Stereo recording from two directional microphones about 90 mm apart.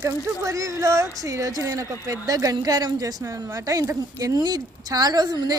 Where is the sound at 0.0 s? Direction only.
35° right (ahead or behind).